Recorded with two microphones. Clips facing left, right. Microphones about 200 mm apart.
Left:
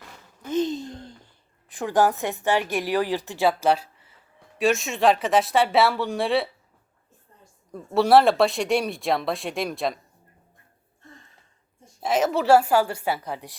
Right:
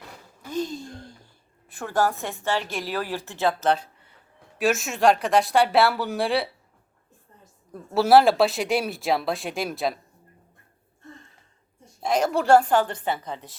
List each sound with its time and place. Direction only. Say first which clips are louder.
0.4 s a sound: left 5 dB; 20° left (ahead or behind)
1.7 s a woman's voice: left 3 dB; 15° left (ahead or behind); by 6.5 s centre (ahead or behind)
7.7 s a woman's voice: even; centre (ahead or behind)
11.9 s a woman's voice: left 1 dB; 5° left (ahead or behind)